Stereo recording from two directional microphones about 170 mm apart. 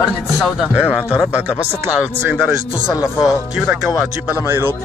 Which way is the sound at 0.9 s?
5° right (ahead or behind).